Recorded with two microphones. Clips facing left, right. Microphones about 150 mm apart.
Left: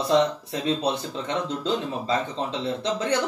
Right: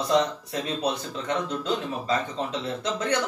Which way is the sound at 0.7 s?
25° left (ahead or behind).